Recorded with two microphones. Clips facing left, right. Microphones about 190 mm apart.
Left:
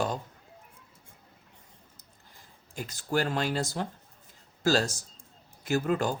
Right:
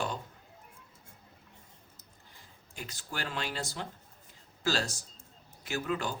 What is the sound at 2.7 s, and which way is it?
Speech, 45° left (ahead or behind).